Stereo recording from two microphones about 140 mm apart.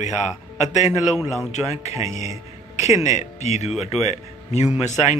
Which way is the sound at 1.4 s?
55° left (ahead or behind).